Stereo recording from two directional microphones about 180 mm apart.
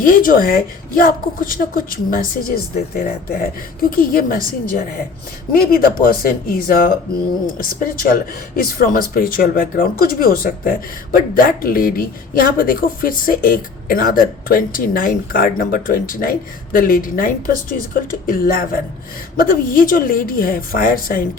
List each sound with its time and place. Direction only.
0.0 s speech: 50° left (ahead or behind)
5.5 s speech: 55° left (ahead or behind)